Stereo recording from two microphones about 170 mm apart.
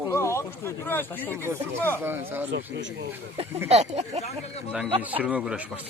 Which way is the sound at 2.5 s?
90° right.